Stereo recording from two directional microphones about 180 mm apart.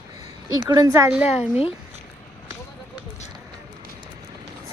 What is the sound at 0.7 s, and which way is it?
Speech, 20° right (ahead or behind).